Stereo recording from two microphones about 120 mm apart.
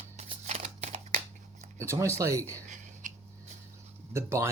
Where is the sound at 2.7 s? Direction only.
90° right.